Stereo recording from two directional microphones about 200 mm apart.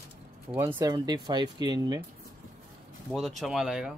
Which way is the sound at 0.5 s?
10° right (ahead or behind).